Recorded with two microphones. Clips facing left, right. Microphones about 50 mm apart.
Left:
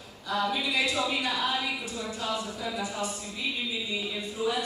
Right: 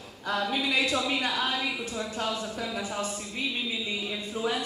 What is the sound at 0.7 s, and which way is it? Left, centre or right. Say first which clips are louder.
Speech: right 1 dB; right.